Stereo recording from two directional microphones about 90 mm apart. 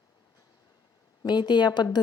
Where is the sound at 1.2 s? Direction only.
55° left (ahead or behind).